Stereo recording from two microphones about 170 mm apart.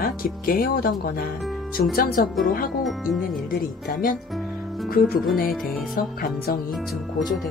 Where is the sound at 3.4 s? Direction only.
60° left (ahead or behind).